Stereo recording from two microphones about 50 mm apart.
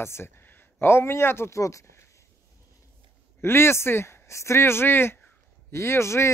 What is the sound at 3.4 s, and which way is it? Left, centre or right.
Speech, left.